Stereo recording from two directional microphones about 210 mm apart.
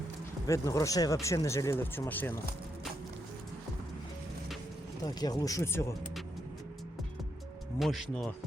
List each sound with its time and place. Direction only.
0.4 s speech: 15° left (ahead or behind)
5.0 s speech: 20° left (ahead or behind)
7.8 s speech: centre (ahead or behind)